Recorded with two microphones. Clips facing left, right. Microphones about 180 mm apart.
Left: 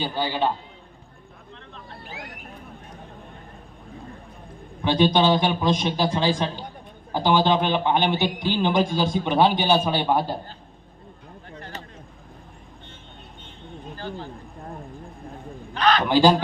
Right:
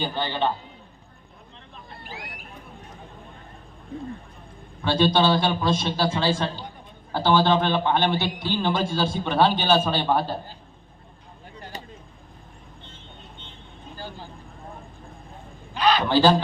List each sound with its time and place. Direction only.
0.0 s a man's voice: 10° left (ahead or behind)
4.8 s a man's voice: 15° left (ahead or behind)
15.7 s a man's voice: 10° right (ahead or behind)
16.0 s a man's voice: 15° left (ahead or behind)